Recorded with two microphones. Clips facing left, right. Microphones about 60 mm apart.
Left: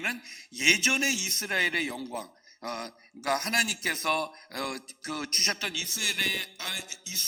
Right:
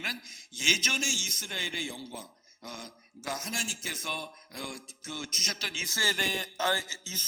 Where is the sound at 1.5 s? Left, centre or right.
Left.